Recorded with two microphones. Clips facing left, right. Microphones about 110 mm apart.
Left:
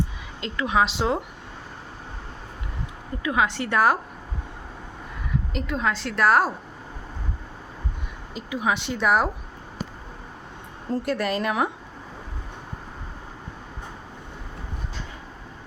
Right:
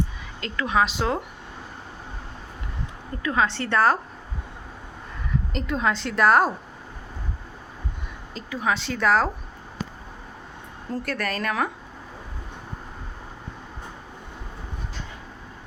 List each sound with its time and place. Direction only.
0.4 s a woman's voice: 20° left (ahead or behind)
3.2 s speech: 15° left (ahead or behind)
5.5 s a woman's voice: centre (ahead or behind)
8.3 s speech: 10° left (ahead or behind)
10.9 s a woman's voice: 20° left (ahead or behind)